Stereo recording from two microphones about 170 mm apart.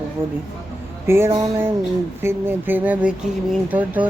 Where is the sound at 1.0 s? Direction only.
15° right (ahead or behind).